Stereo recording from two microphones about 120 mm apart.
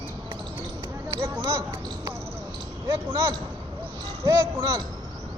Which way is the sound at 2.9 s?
25° right (ahead or behind).